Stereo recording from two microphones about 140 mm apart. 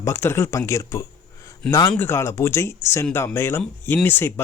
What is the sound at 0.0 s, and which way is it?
Speech, 15° left (ahead or behind).